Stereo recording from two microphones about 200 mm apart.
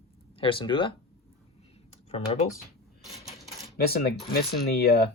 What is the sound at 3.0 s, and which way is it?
Cash register, centre (ahead or behind).